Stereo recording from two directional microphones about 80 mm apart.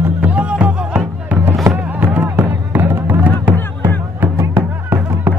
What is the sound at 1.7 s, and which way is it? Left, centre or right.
Music, right.